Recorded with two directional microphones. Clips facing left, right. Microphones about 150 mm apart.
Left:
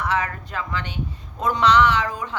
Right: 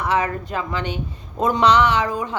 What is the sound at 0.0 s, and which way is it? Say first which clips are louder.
A woman's voice: right 3 dB; 15° right (ahead or behind).